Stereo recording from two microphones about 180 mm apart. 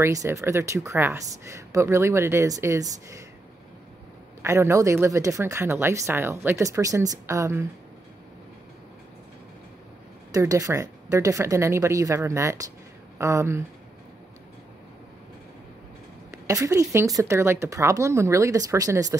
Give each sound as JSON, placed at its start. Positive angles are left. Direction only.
{"t": 0.0, "sound": "speech", "side_deg": -15}
{"t": 4.4, "sound": "speech", "side_deg": -15}
{"t": 10.3, "sound": "speech", "side_deg": -20}
{"t": 16.4, "sound": "speech", "side_deg": -15}